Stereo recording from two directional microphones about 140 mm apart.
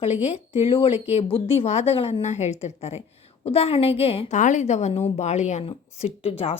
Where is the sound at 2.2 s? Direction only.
55° left (ahead or behind).